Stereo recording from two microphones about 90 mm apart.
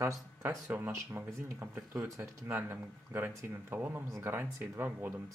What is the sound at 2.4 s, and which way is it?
Speech, 20° right (ahead or behind).